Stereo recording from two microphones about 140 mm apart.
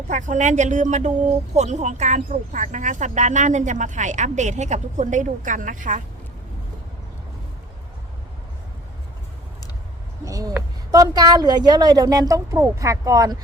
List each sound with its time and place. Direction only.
0.1 s speech: 60° right (ahead or behind)
10.2 s a woman's voice: 25° right (ahead or behind)